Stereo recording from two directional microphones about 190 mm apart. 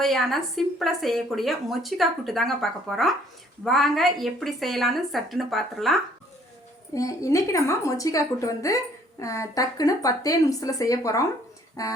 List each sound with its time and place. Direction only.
0.0 s a woman's voice: centre (ahead or behind)
6.9 s a woman's voice: 15° left (ahead or behind)